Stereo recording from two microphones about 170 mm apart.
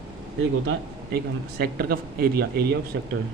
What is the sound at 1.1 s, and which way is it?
Speech, 65° right (ahead or behind).